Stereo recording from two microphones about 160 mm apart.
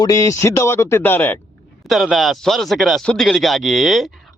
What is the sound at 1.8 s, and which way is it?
Speech, centre (ahead or behind).